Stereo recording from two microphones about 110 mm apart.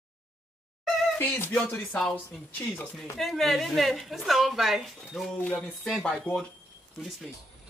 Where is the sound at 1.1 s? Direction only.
15° left (ahead or behind).